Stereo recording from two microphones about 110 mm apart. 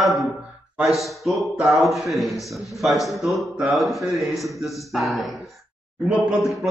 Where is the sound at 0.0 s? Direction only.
Centre (ahead or behind).